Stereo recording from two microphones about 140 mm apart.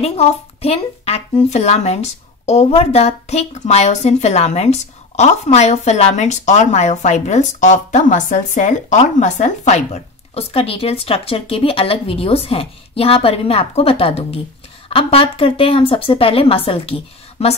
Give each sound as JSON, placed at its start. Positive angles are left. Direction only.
{"t": 0.0, "sound": "speech", "side_deg": 50}